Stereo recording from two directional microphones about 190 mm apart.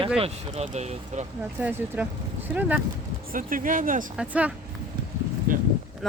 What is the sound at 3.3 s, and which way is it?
Speech, 45° right (ahead or behind).